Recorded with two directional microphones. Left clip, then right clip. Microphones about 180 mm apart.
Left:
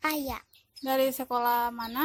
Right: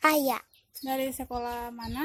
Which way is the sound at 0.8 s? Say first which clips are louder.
Left 5 dB; 30° left (ahead or behind).